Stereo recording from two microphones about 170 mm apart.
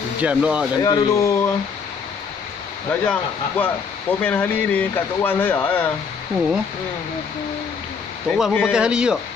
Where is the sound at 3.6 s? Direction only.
10° left (ahead or behind).